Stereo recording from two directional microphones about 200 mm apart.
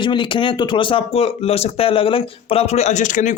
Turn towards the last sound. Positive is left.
turn(degrees=40)  # may be behind; listen again after turning